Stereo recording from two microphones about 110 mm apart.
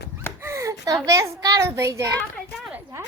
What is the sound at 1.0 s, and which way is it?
A woman's voice, 30° right (ahead or behind).